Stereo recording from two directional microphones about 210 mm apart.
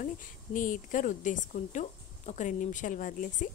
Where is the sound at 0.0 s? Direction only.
40° left (ahead or behind).